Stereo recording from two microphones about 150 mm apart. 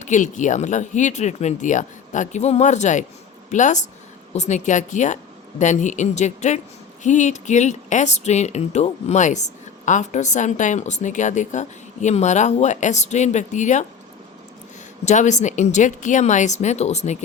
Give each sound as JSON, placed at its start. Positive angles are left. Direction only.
{"t": 0.0, "sound": "speech", "side_deg": 55}
{"t": 15.0, "sound": "speech", "side_deg": 55}